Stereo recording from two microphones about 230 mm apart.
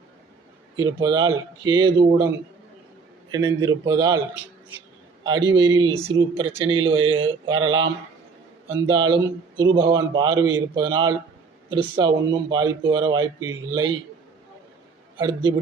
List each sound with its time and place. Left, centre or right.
0.8 s speech: centre
3.3 s speech: centre
5.2 s speech: centre
15.2 s speech: centre